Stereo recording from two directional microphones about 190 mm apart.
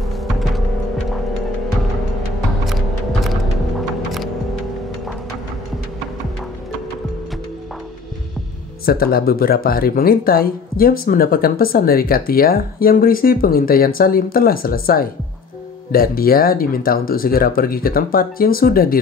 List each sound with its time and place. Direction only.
2.6 s music: centre (ahead or behind)
8.8 s speech: 50° left (ahead or behind)